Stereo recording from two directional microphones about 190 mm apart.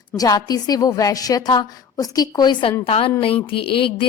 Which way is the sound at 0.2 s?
20° left (ahead or behind).